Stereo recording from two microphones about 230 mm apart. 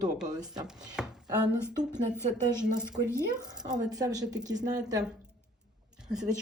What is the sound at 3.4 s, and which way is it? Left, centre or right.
Speech, centre.